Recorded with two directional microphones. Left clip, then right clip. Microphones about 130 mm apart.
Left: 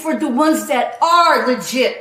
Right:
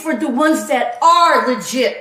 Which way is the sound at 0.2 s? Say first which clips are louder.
Even; 25° left (ahead or behind).